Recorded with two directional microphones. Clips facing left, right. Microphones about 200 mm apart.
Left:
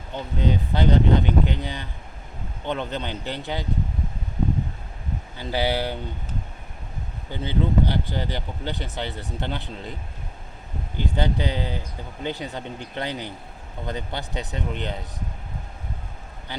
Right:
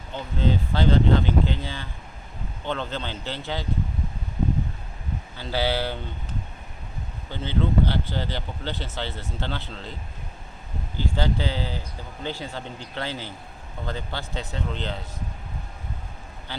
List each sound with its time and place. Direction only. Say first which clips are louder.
0.1 s speech: even; 15° left (ahead or behind)
5.4 s speech: left 1 dB; 15° left (ahead or behind)
7.3 s speech: left 1 dB; 15° left (ahead or behind)
11.0 s speech: left 1 dB; 20° left (ahead or behind)